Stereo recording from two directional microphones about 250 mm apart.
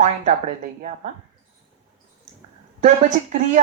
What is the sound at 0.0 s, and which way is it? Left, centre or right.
Speech, right.